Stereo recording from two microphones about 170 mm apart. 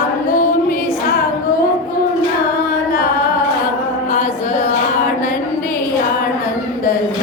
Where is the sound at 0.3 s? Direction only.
50° left (ahead or behind).